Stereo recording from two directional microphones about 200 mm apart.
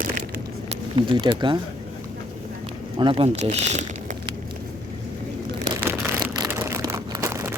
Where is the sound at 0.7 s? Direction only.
25° right (ahead or behind).